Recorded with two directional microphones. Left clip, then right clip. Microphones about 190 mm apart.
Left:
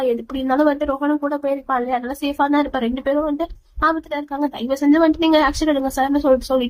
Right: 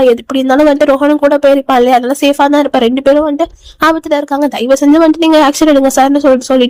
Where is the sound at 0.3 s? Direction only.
45° right (ahead or behind).